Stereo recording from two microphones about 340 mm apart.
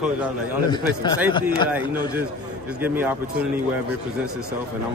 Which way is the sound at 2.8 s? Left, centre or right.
Centre.